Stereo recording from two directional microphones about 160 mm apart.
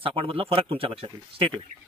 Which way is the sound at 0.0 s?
35° right (ahead or behind).